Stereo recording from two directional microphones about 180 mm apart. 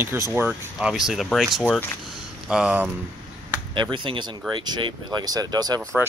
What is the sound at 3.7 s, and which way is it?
Speech, 25° right (ahead or behind).